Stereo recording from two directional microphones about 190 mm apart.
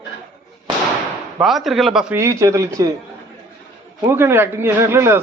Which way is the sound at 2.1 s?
15° right (ahead or behind).